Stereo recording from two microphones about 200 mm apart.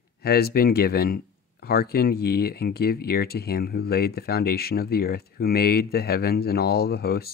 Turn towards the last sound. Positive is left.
turn(degrees=50)  # may be behind; listen again after turning